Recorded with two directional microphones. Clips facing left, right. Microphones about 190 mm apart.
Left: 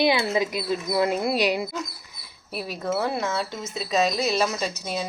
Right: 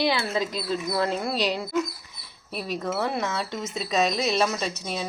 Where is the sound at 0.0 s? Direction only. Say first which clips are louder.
Left 3 dB; 15° left (ahead or behind).